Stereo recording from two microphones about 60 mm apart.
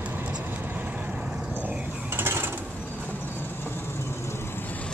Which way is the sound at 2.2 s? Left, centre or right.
Right.